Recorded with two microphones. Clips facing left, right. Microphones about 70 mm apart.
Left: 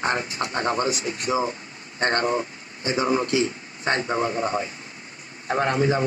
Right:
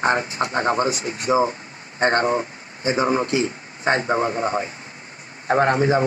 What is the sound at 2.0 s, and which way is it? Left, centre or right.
Speech, right.